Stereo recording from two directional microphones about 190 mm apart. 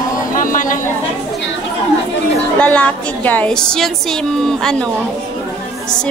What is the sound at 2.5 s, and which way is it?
A woman's voice, 5° left (ahead or behind).